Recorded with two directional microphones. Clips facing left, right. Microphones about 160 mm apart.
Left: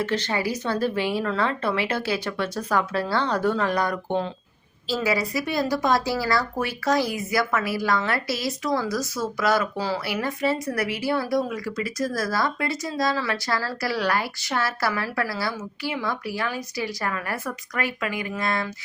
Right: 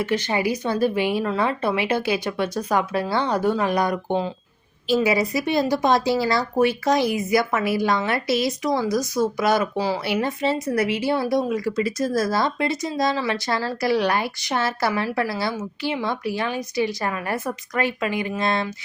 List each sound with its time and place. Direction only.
0.0 s a woman's voice: 10° right (ahead or behind)